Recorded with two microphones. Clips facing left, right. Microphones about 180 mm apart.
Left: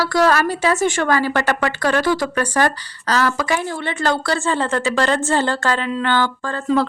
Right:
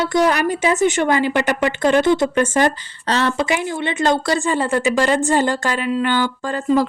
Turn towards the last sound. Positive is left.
turn(degrees=-15)  # may be behind; listen again after turning